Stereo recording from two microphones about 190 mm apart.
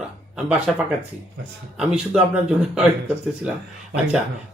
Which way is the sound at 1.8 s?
5° right (ahead or behind).